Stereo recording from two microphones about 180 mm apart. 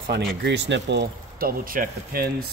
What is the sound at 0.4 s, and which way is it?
Speech, 80° right.